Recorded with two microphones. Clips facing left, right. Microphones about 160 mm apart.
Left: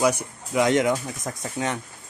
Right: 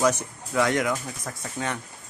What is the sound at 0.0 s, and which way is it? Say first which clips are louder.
Speech: left 1 dB; 10° left (ahead or behind).